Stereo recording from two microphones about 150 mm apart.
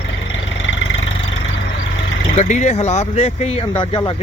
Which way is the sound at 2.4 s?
55° left (ahead or behind).